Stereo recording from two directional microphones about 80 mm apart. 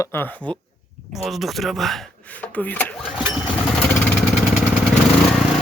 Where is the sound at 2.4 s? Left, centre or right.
Left.